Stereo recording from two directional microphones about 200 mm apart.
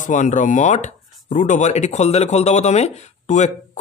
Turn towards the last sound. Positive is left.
turn(degrees=35)  # may be behind; listen again after turning